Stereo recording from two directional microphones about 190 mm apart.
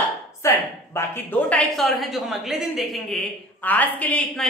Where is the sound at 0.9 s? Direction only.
10° left (ahead or behind).